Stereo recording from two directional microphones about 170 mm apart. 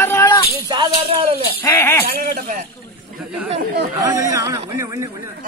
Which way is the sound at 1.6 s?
15° left (ahead or behind).